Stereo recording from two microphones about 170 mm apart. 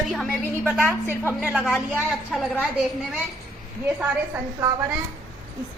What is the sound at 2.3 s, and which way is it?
Speech, centre (ahead or behind).